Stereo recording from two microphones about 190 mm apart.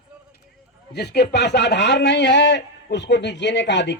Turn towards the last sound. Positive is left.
turn(degrees=65)  # may be behind; listen again after turning